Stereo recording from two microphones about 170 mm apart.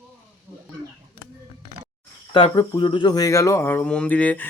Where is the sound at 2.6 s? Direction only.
15° left (ahead or behind).